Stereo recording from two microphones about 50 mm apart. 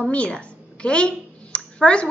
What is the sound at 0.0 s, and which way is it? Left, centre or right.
A woman's voice, left.